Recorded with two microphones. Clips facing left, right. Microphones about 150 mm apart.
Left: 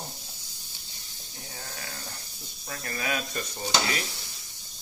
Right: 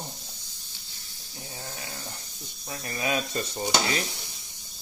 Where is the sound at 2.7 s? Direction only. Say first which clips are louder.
Right 3 dB; 20° right (ahead or behind).